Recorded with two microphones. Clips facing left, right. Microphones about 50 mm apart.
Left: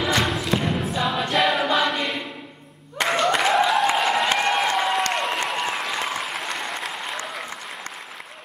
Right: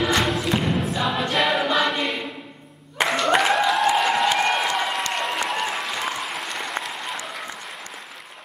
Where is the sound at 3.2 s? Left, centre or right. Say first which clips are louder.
Even; centre.